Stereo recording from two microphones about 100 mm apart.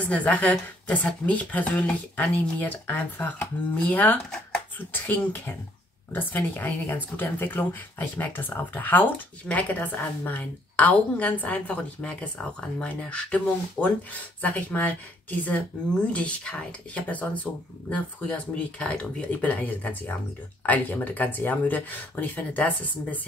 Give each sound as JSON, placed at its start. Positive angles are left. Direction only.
{"t": 0.0, "sound": "a woman's voice", "side_deg": 15}
{"t": 16.1, "sound": "a woman's voice", "side_deg": 10}